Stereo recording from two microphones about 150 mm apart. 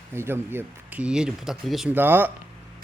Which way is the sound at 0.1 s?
15° right (ahead or behind).